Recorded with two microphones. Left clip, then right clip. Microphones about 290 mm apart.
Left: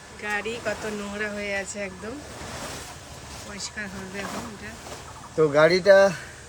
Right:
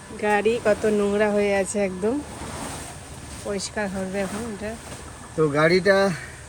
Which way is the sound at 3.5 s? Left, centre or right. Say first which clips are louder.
Right 8 dB; centre.